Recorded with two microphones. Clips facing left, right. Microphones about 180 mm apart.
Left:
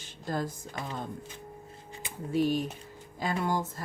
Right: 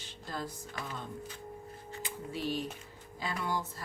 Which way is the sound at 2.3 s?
45° left (ahead or behind).